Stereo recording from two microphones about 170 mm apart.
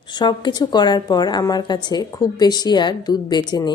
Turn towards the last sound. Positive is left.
turn(degrees=25)  # may be behind; listen again after turning